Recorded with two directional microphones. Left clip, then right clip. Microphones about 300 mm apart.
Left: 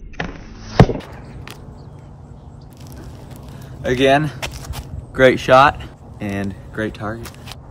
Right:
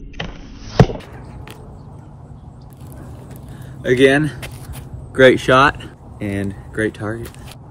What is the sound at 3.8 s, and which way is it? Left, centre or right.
Speech, centre.